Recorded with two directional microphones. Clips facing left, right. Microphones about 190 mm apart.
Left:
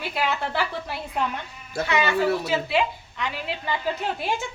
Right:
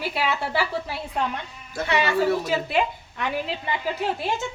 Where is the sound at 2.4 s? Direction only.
45° right (ahead or behind).